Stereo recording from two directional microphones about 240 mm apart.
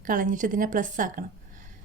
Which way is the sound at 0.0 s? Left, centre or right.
Right.